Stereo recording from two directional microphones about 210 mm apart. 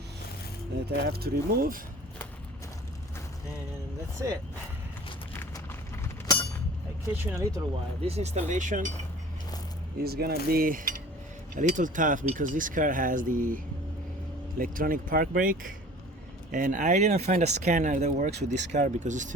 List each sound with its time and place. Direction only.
0.9 s speech: 50° right (ahead or behind)
5.3 s a sound: 10° left (ahead or behind)
7.2 s speech: 10° right (ahead or behind)
8.0 s speech: 30° right (ahead or behind)
10.0 s speech: 50° right (ahead or behind)
14.6 s speech: 40° right (ahead or behind)